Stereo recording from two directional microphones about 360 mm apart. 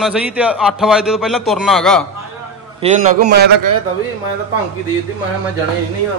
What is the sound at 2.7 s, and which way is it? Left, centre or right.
Speech, centre.